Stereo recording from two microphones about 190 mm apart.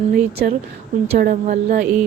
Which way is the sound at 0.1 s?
55° right (ahead or behind).